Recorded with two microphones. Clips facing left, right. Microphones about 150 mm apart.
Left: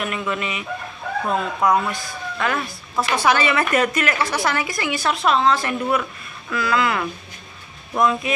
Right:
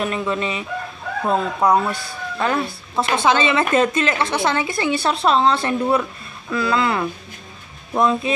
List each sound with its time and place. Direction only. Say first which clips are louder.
0.0 s speech: right 3 dB; 30° right (ahead or behind)